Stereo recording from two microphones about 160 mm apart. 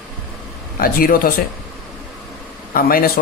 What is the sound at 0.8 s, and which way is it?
Speech, 65° left (ahead or behind).